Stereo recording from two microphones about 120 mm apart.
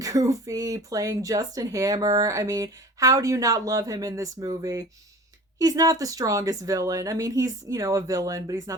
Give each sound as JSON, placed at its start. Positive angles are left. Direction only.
{"t": 0.0, "sound": "speech", "side_deg": -30}